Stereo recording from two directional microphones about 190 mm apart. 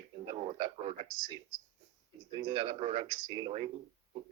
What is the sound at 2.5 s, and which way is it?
Speech, 30° right (ahead or behind).